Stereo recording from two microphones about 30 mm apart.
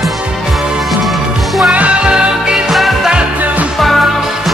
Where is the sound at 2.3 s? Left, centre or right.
Centre.